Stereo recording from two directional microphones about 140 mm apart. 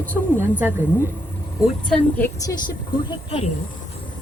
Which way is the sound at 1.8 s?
5° left (ahead or behind).